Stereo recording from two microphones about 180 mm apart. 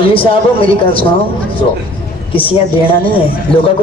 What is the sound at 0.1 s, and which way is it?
Speech, 30° left (ahead or behind).